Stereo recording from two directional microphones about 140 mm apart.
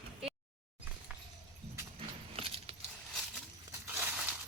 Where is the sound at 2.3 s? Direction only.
45° right (ahead or behind).